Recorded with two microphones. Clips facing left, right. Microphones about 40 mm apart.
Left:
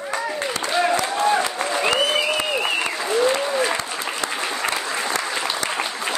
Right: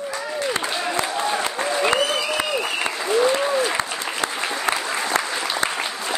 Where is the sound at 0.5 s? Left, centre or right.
Right.